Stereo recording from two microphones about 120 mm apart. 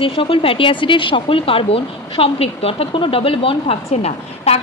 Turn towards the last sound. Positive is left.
turn(degrees=60)  # may be behind; listen again after turning